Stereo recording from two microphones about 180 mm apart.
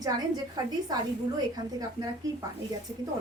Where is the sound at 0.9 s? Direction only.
20° right (ahead or behind).